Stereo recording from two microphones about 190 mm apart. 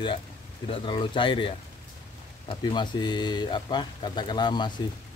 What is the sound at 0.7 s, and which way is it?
Speech, 25° left (ahead or behind).